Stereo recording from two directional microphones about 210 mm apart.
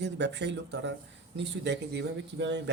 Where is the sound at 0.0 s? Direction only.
55° right (ahead or behind).